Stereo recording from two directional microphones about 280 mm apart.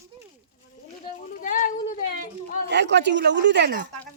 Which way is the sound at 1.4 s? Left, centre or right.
Left.